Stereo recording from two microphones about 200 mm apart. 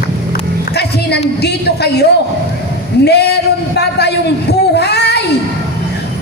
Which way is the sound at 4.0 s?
55° left (ahead or behind).